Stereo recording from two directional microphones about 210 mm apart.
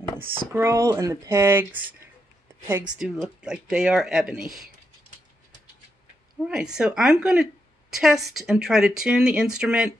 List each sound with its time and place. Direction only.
0.5 s speech: 15° right (ahead or behind)
6.4 s speech: 5° right (ahead or behind)